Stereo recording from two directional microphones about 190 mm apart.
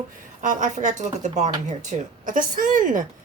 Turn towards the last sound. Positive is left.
turn(degrees=-45)  # may be behind; listen again after turning